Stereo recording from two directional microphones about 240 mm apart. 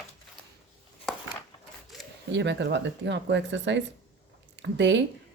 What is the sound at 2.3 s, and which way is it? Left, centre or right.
Speech, right.